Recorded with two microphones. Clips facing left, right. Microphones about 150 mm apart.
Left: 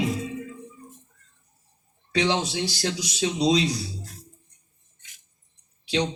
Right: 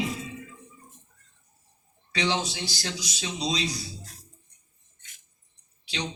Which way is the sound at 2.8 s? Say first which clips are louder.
Left 10 dB; 55° left (ahead or behind).